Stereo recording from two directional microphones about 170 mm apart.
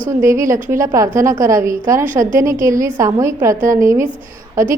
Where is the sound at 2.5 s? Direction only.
50° right (ahead or behind).